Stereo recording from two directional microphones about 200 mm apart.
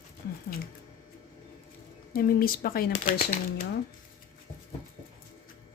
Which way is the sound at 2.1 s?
45° left (ahead or behind).